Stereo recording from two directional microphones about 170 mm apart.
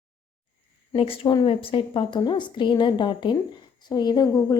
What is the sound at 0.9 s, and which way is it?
A woman's voice, 35° left (ahead or behind).